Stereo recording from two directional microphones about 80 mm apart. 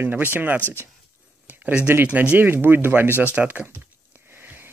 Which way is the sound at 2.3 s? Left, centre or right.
Right.